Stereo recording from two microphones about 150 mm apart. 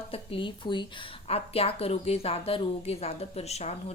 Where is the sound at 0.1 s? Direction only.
35° left (ahead or behind).